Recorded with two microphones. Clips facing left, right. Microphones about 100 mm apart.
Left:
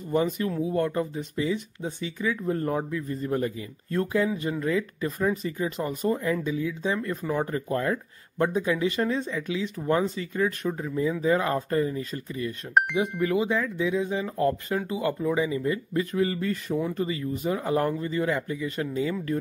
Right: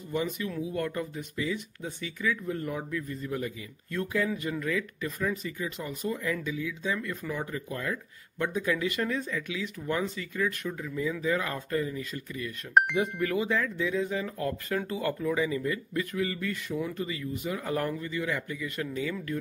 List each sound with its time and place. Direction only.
0.1 s speech: 40° left (ahead or behind)
2.9 s speech: 25° left (ahead or behind)
3.2 s speech: 40° left (ahead or behind)
12.8 s speech: centre (ahead or behind)
13.2 s speech: 20° left (ahead or behind)